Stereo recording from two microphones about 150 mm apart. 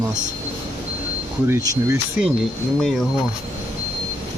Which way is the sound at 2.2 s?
5° right (ahead or behind).